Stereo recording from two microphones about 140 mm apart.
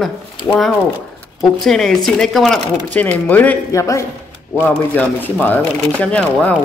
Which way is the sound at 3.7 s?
20° left (ahead or behind).